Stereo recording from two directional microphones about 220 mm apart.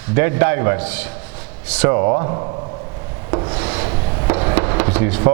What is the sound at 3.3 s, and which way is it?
Rub, 25° right (ahead or behind).